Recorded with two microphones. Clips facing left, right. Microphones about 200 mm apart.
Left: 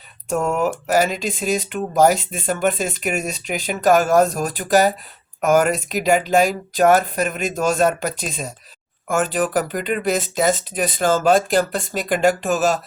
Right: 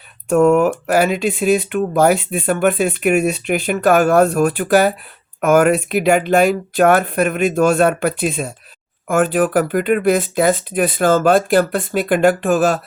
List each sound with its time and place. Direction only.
0.3 s speech: 60° right (ahead or behind)
0.5 s speech: 50° right (ahead or behind)